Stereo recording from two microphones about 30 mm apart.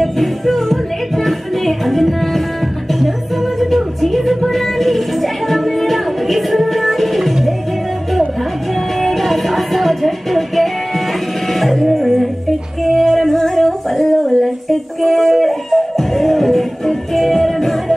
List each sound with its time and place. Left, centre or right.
0.0 s music: centre
3.5 s music: centre
9.0 s music: centre